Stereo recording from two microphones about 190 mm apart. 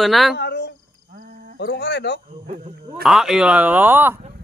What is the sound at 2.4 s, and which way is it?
Speech, 35° right (ahead or behind).